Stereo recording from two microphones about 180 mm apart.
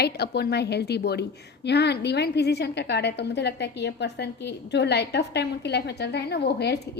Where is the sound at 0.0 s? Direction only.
65° left (ahead or behind).